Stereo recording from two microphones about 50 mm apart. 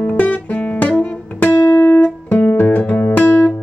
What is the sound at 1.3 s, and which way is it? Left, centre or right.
Music, left.